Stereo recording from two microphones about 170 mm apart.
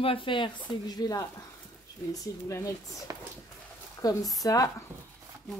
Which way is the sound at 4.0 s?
20° left (ahead or behind).